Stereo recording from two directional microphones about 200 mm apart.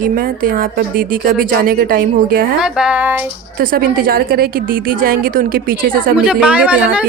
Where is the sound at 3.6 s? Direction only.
50° right (ahead or behind).